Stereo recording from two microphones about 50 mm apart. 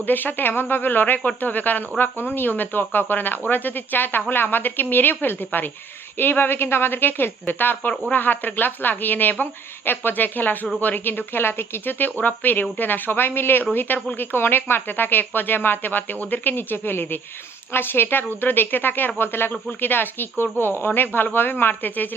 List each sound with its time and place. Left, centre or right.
0.0 s speech: left